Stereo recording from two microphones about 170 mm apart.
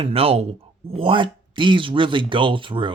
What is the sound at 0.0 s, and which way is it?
Speech, 35° right (ahead or behind).